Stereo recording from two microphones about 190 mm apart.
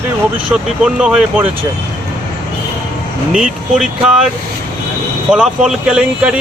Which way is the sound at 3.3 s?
5° right (ahead or behind).